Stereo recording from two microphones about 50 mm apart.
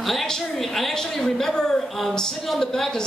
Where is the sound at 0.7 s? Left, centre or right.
Centre.